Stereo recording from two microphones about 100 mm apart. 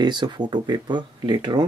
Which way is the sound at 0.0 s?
50° right (ahead or behind).